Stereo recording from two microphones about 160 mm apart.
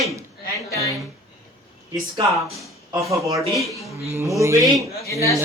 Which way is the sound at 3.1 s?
20° right (ahead or behind).